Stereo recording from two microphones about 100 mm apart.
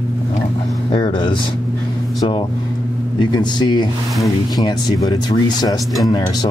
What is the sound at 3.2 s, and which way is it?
Speech, 45° left (ahead or behind).